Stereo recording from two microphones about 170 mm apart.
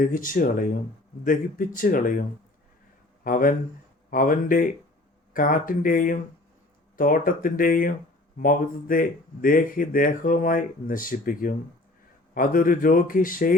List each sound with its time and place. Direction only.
0.0 s speech: 55° left (ahead or behind)
3.2 s speech: 55° left (ahead or behind)